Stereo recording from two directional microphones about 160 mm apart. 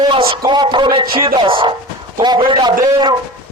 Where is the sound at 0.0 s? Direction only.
30° right (ahead or behind).